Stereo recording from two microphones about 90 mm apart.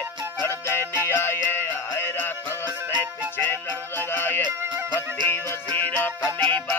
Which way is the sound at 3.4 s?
25° left (ahead or behind).